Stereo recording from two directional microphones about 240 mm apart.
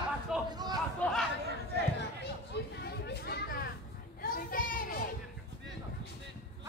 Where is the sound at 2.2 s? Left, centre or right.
Left.